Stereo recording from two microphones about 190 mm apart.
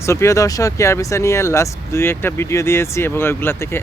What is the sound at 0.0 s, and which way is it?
Speech, 15° left (ahead or behind).